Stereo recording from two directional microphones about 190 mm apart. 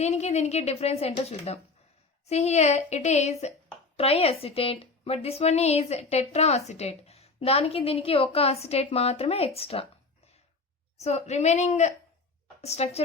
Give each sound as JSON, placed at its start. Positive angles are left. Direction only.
{"t": 0.0, "sound": "a woman's voice", "side_deg": 35}
{"t": 10.9, "sound": "a woman's voice", "side_deg": 35}